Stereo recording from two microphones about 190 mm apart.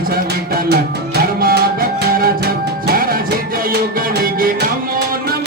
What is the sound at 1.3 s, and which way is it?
Music, 50° right (ahead or behind).